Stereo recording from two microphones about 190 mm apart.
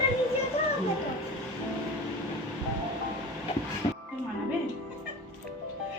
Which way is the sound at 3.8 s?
30° left (ahead or behind).